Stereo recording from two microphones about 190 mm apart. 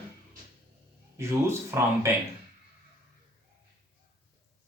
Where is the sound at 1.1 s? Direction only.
15° right (ahead or behind).